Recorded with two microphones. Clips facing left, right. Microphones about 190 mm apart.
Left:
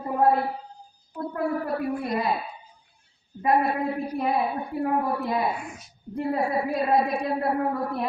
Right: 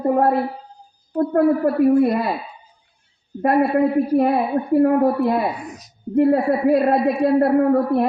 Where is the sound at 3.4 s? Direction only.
60° right (ahead or behind).